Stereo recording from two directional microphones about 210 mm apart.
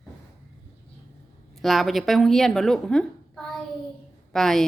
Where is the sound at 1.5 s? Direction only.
Centre (ahead or behind).